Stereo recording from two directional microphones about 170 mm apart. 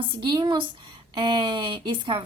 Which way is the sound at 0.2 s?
25° right (ahead or behind).